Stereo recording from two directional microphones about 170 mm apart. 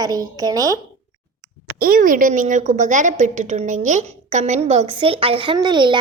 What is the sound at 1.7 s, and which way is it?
A woman's voice, 55° right (ahead or behind).